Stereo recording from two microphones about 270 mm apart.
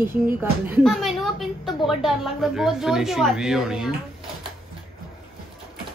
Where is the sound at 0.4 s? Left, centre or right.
Centre.